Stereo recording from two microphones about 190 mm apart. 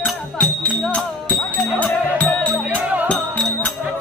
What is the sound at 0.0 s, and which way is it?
Music, 5° left (ahead or behind).